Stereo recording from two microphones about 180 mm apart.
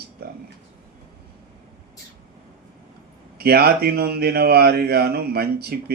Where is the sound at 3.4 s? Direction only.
60° right (ahead or behind).